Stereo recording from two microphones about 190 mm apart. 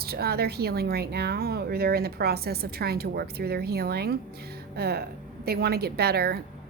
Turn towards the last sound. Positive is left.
turn(degrees=-55)  # may be behind; listen again after turning